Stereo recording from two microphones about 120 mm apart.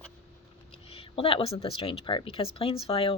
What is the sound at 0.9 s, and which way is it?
Speech, 50° left (ahead or behind).